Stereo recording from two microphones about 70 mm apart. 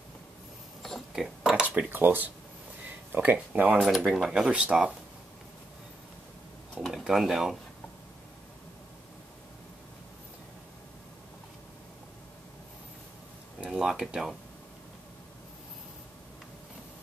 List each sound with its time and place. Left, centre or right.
0.8 s a sound: centre
1.9 s speech: right
3.8 s speech: centre
4.3 s speech: centre
6.9 s speech: centre
13.6 s a sound: centre